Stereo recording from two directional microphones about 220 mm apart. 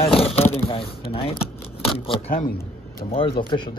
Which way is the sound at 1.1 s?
25° left (ahead or behind).